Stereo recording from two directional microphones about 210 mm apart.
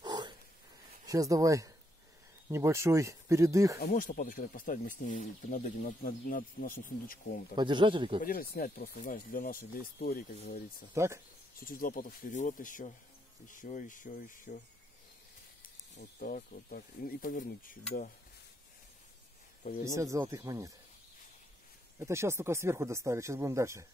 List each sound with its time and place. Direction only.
0.0 s a sound: 20° right (ahead or behind)
1.0 s speech: 15° right (ahead or behind)
3.8 s speech: 40° left (ahead or behind)
7.5 s speech: 20° right (ahead or behind)
8.2 s speech: 45° left (ahead or behind)
11.0 s speech: 15° right (ahead or behind)
11.6 s speech: 45° left (ahead or behind)
16.0 s speech: 40° left (ahead or behind)
19.8 s speech: 15° right (ahead or behind)
21.9 s speech: 15° right (ahead or behind)